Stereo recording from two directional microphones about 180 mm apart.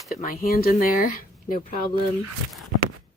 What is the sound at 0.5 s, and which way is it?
Speech, 55° left (ahead or behind).